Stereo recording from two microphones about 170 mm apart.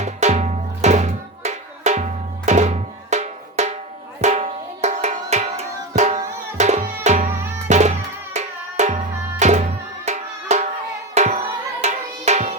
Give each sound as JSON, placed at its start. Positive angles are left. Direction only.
{"t": 0.0, "sound": "music", "side_deg": -40}
{"t": 2.5, "sound": "drum", "side_deg": -45}
{"t": 6.0, "sound": "music", "side_deg": -40}